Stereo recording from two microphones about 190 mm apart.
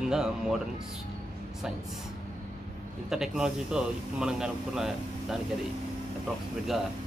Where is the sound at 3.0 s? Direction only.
Centre (ahead or behind).